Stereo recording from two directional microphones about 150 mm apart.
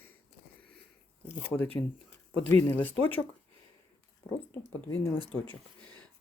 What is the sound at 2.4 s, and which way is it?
Speech, 10° left (ahead or behind).